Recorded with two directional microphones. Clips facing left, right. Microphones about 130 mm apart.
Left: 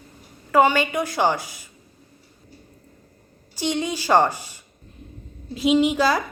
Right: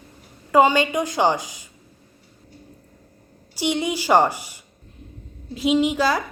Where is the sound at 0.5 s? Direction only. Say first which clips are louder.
Right 1 dB; 20° right (ahead or behind).